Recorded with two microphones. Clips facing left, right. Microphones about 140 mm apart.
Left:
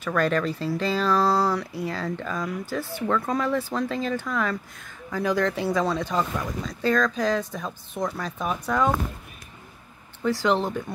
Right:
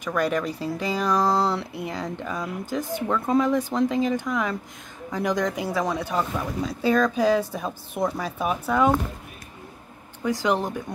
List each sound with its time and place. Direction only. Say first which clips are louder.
0.0 s speech: left 1 dB; 15° right (ahead or behind)
10.2 s speech: left 1 dB; 15° right (ahead or behind)